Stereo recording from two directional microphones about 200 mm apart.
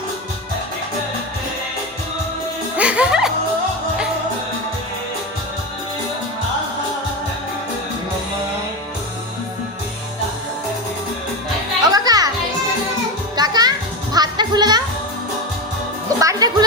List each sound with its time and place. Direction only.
2.7 s music: 5° right (ahead or behind)
11.8 s music: 20° right (ahead or behind)
13.3 s music: 20° right (ahead or behind)
16.2 s music: 20° right (ahead or behind)